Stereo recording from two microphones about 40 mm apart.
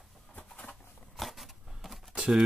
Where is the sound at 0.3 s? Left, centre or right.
Left.